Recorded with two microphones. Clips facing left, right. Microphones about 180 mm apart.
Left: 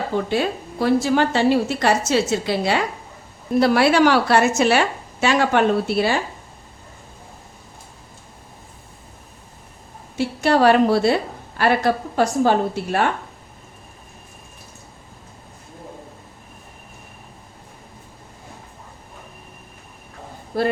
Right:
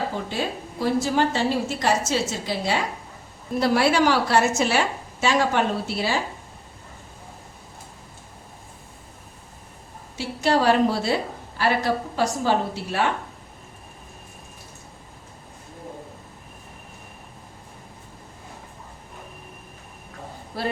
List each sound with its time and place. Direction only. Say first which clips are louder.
0.3 s a woman's voice: left 6 dB; 65° left (ahead or behind)
10.2 s a woman's voice: left 4 dB; 60° left (ahead or behind)
20.5 s speech: left 7 dB; 50° left (ahead or behind)